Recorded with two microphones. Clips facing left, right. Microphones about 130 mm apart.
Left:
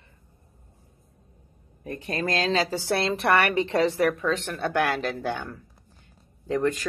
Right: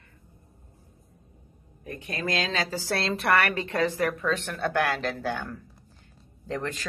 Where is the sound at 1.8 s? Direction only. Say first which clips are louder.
Left 4 dB; 35° left (ahead or behind).